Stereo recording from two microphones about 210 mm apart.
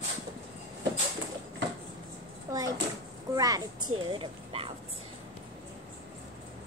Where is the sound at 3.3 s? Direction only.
15° right (ahead or behind).